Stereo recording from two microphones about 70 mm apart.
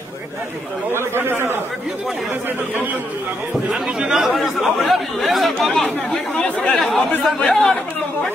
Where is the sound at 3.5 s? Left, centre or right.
Centre.